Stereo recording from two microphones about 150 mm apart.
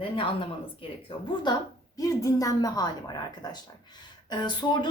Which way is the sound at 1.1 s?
35° left (ahead or behind).